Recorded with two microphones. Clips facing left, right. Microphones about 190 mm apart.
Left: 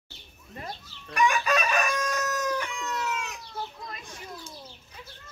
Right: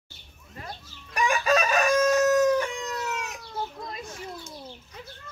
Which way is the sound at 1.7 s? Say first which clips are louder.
Right 7 dB; 35° right (ahead or behind).